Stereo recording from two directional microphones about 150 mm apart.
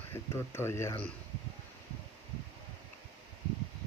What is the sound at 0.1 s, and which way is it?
Speech, 15° left (ahead or behind).